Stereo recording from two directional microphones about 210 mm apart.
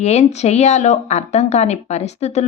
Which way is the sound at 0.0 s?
30° left (ahead or behind).